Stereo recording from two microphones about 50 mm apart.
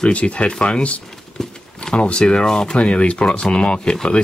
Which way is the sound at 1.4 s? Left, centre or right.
Centre.